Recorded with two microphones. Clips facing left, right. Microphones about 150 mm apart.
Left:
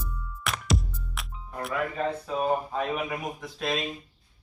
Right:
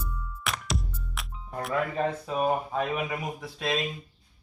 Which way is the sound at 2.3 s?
15° right (ahead or behind).